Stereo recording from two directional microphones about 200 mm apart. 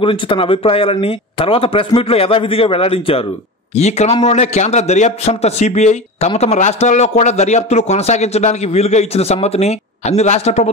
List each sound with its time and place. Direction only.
0.0 s a man's voice: 25° left (ahead or behind)